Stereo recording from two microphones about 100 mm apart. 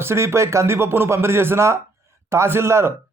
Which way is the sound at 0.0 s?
25° right (ahead or behind).